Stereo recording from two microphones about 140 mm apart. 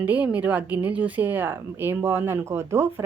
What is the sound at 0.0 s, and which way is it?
A woman's voice, 10° right (ahead or behind).